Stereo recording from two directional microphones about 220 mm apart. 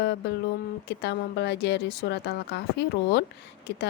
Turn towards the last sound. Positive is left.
turn(degrees=50)  # may be behind; listen again after turning